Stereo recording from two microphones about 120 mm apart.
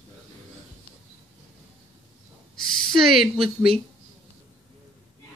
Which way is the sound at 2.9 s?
Centre (ahead or behind).